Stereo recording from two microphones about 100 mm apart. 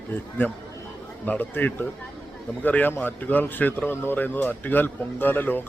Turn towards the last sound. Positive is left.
turn(degrees=20)  # may be behind; listen again after turning